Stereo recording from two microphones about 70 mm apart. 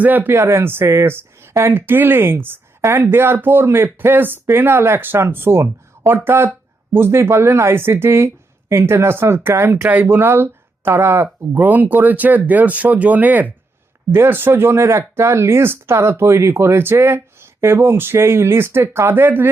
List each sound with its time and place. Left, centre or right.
0.0 s speech: right
0.3 s speech: right
9.9 s speech: right
11.5 s speech: right